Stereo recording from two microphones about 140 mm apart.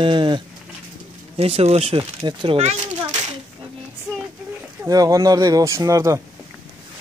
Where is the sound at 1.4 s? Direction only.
45° right (ahead or behind).